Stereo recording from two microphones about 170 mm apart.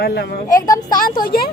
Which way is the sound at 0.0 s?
75° left (ahead or behind).